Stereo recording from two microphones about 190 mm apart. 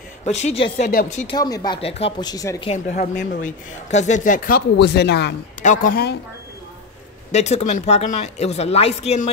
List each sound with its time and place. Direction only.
0.2 s speech: 35° left (ahead or behind)
1.3 s speech: 20° left (ahead or behind)
2.7 s speech: 40° left (ahead or behind); by 5.3 s 60° left (ahead or behind)
5.6 s speech: 45° left (ahead or behind)
7.3 s speech: 35° left (ahead or behind)